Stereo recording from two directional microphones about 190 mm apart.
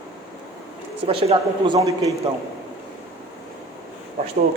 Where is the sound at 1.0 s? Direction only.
30° right (ahead or behind).